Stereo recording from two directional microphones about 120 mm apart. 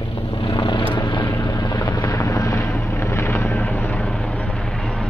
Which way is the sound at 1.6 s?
35° left (ahead or behind).